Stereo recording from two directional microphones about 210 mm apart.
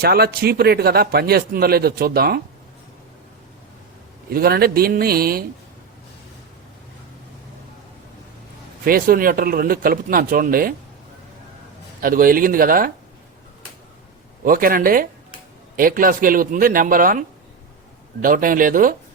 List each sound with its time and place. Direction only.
0.0 s speech: 45° right (ahead or behind)
4.3 s speech: 45° right (ahead or behind)
8.8 s speech: 45° right (ahead or behind)
11.9 s speech: 40° right (ahead or behind)
14.4 s speech: 40° right (ahead or behind)